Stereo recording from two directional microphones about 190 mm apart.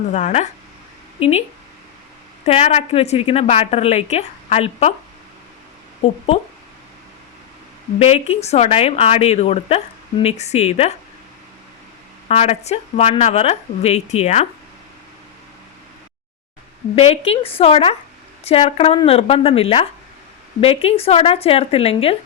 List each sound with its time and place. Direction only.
0.1 s a woman's voice: 40° left (ahead or behind)
7.9 s a woman's voice: 30° left (ahead or behind)
12.3 s a woman's voice: 35° left (ahead or behind)
16.9 s a woman's voice: 30° left (ahead or behind)